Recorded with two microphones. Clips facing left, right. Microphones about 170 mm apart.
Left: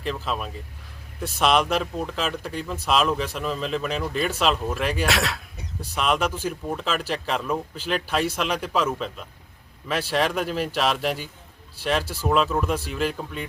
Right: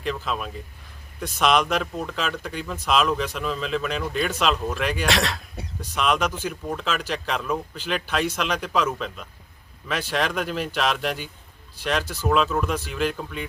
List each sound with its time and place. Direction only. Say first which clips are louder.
0.0 s speech: even; centre (ahead or behind)